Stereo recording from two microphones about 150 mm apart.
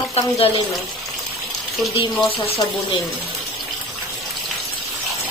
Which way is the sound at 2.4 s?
40° left (ahead or behind).